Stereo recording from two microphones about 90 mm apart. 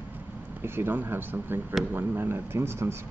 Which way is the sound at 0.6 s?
25° right (ahead or behind).